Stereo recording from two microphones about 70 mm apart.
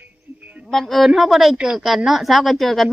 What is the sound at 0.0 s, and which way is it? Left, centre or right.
Music, right.